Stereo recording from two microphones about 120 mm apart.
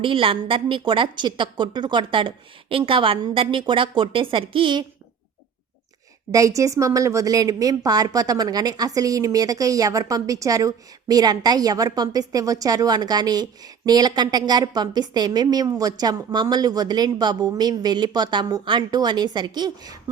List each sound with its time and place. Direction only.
0.0 s a woman's voice: 50° right (ahead or behind)
6.3 s a woman's voice: 25° right (ahead or behind)